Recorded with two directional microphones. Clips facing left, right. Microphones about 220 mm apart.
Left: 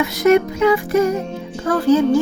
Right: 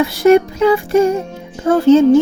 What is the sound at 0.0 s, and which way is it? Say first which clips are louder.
Music: right 4 dB; 30° right (ahead or behind).